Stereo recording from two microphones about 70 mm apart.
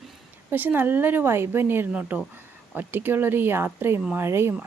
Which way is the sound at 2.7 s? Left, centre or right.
Right.